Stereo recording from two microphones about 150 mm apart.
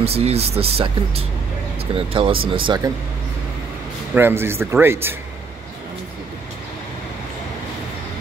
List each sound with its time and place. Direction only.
0.0 s speech: 45° right (ahead or behind)
4.1 s speech: 15° right (ahead or behind)